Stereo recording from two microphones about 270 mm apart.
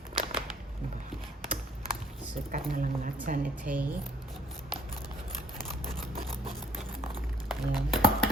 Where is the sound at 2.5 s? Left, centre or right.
Right.